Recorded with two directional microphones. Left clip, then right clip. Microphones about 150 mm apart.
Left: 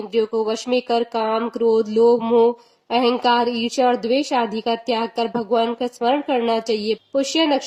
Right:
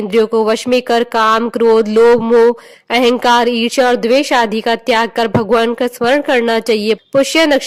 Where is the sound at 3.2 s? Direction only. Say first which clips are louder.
Right 7 dB; 40° right (ahead or behind).